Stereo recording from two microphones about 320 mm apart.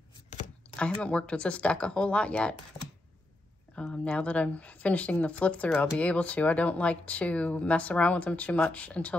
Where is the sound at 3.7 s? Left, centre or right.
Centre.